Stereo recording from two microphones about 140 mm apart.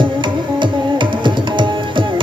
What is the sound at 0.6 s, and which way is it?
Tabla, 35° right (ahead or behind).